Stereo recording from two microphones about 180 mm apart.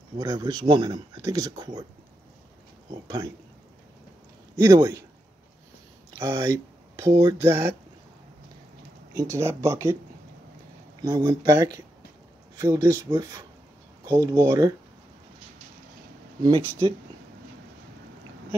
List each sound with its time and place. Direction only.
0.2 s speech: 20° right (ahead or behind)
2.9 s speech: 20° right (ahead or behind)
4.6 s speech: 20° right (ahead or behind)
6.1 s speech: 15° right (ahead or behind)
9.1 s speech: 15° right (ahead or behind)
11.1 s speech: 25° right (ahead or behind)
16.4 s speech: 25° right (ahead or behind)